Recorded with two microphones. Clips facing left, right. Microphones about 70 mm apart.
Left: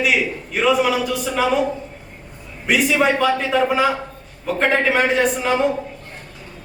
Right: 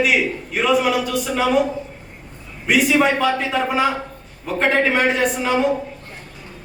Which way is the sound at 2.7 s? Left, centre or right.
Centre.